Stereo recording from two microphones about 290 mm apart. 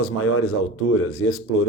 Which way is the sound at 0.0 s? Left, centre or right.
Left.